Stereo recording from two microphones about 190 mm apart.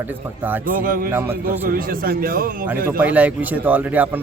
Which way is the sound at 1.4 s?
50° right (ahead or behind).